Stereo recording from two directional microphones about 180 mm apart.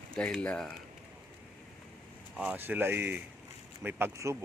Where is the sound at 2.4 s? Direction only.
10° right (ahead or behind).